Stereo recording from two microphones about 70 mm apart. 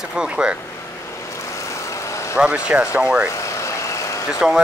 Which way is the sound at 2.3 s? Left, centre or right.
Centre.